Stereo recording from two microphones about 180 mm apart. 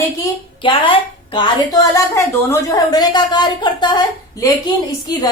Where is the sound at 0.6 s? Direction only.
30° left (ahead or behind).